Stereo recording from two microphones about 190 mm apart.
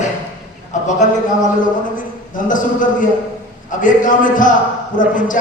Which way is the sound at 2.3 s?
45° left (ahead or behind).